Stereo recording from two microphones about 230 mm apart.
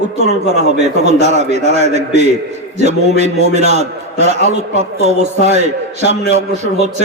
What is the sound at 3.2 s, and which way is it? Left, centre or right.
A man's voice, right.